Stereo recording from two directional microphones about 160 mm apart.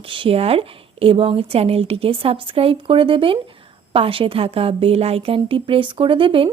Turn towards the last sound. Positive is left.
turn(degrees=-35)  # may be behind; listen again after turning